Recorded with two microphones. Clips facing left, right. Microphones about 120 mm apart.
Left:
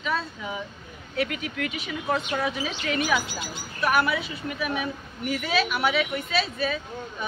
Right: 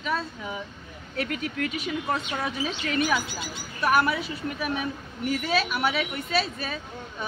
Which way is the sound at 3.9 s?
40° right (ahead or behind).